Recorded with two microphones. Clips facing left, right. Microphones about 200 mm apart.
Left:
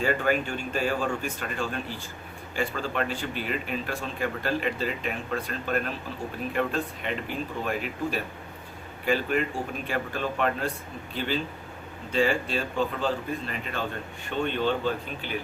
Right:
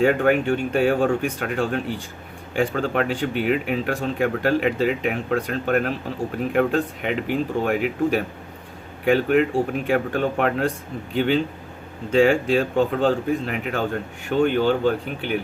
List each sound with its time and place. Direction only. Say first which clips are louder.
0.0 s speech: right 8 dB; 65° right (ahead or behind)